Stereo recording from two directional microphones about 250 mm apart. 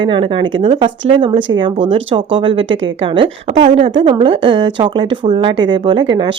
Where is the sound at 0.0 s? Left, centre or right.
Centre.